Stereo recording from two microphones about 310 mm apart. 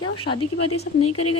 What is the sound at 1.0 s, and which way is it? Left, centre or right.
Speech, left.